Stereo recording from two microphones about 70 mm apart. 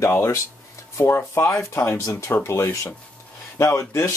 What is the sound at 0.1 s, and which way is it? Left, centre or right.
Speech, left.